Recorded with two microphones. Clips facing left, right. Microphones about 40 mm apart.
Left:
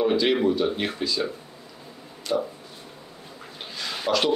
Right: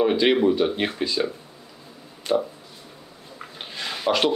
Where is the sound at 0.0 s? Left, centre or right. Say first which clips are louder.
Right 2 dB; right.